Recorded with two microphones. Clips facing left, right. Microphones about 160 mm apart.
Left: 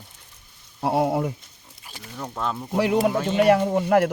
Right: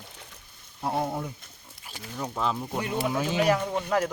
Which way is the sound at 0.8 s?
75° left (ahead or behind).